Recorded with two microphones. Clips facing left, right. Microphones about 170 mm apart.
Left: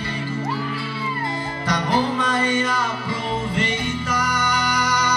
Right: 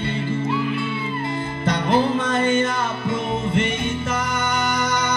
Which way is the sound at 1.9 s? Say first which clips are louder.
Right 3 dB; 25° right (ahead or behind).